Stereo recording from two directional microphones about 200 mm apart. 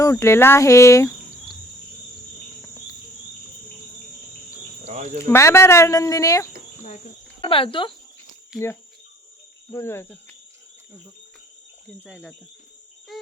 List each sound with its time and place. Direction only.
0.0 s speech: 15° left (ahead or behind)
4.9 s speech: 35° right (ahead or behind)
5.2 s speech: 15° left (ahead or behind)
8.5 s speech: 5° right (ahead or behind)
9.7 s speech: 10° left (ahead or behind)
11.9 s speech: 5° right (ahead or behind)
13.1 s cricket: centre (ahead or behind)